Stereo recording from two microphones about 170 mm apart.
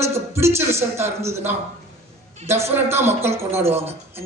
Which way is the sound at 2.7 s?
15° right (ahead or behind).